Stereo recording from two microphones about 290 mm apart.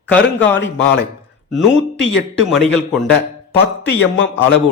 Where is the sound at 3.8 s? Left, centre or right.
Left.